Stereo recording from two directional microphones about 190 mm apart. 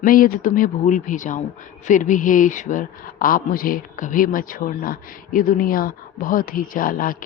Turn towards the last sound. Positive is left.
turn(degrees=45)  # may be behind; listen again after turning